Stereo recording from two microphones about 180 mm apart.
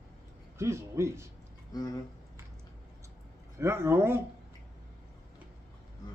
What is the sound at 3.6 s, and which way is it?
Speech, 15° right (ahead or behind).